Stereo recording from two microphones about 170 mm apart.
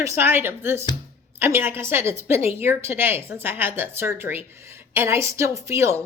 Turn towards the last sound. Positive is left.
turn(degrees=-15)  # may be behind; listen again after turning